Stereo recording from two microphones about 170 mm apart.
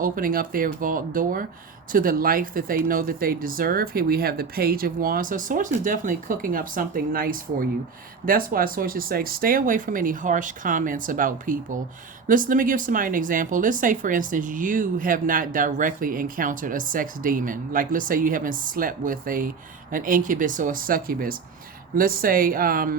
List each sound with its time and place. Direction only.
0.0 s speech: 55° right (ahead or behind)